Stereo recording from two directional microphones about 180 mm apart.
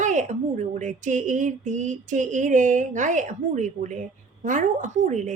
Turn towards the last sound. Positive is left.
turn(degrees=-40)  # may be behind; listen again after turning